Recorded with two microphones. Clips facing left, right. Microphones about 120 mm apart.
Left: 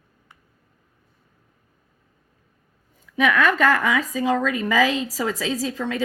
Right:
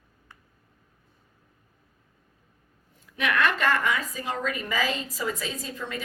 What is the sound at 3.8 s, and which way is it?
A woman's voice, 90° left.